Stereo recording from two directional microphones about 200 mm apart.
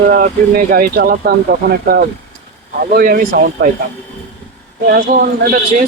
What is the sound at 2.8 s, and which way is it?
Speech, 45° right (ahead or behind).